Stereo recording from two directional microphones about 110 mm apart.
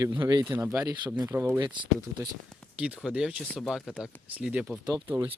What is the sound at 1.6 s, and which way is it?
Speech, 45° right (ahead or behind).